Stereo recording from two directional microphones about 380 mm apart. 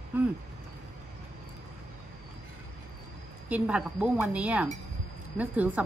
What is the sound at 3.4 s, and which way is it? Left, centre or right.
Speech, centre.